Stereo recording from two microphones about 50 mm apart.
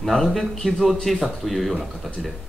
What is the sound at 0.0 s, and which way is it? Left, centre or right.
Speech, centre.